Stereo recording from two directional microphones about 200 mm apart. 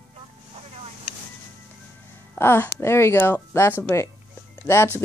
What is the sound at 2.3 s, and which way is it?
Speech, 10° left (ahead or behind).